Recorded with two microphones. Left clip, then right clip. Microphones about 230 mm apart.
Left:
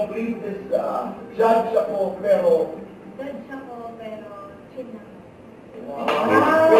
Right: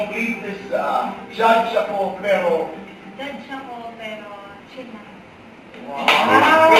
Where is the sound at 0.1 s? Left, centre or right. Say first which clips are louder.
Right 3 dB; centre.